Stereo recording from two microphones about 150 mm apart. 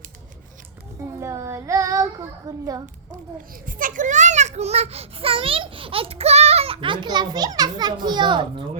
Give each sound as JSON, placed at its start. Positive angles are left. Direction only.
{"t": 0.9, "sound": "child singing", "side_deg": -20}
{"t": 2.5, "sound": "a child's voice", "side_deg": -25}
{"t": 3.7, "sound": "a child's voice", "side_deg": -65}